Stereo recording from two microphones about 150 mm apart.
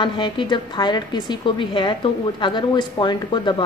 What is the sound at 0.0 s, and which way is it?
Speech, 35° left (ahead or behind).